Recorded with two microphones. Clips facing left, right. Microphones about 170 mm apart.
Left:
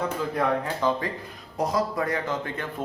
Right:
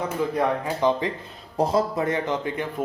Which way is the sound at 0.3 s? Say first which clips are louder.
Even; 20° right (ahead or behind).